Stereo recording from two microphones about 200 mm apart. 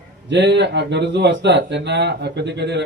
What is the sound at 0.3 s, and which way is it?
Speech, 60° right (ahead or behind).